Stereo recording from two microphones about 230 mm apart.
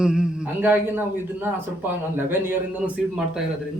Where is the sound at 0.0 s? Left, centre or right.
Centre.